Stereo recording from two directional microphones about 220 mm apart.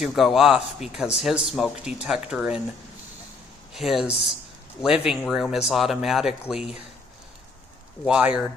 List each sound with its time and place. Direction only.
0.0 s a man's voice: centre (ahead or behind)
3.8 s a man's voice: centre (ahead or behind)
8.0 s a man's voice: 5° right (ahead or behind)